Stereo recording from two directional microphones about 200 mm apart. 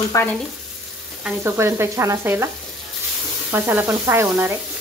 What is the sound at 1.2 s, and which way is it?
Sizzle, 10° right (ahead or behind).